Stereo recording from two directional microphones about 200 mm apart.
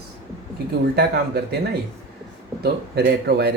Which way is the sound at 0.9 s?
55° right (ahead or behind).